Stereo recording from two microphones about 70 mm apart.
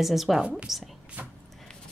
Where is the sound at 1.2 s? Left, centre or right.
Right.